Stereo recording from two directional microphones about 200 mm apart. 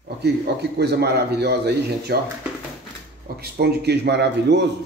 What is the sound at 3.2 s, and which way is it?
A man's voice, 50° right (ahead or behind).